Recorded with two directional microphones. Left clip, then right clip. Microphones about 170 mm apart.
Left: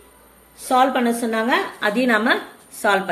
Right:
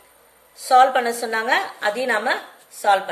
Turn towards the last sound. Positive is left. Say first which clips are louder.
# right 1 dB
turn(degrees=-10)  # may be behind; listen again after turning